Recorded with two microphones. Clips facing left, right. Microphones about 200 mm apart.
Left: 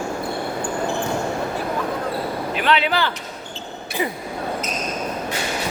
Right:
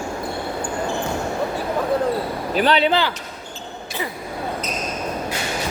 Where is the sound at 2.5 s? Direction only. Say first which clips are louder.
Right 4 dB; 35° right (ahead or behind).